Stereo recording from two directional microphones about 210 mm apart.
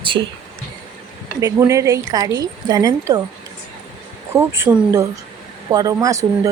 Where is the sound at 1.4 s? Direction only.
15° right (ahead or behind).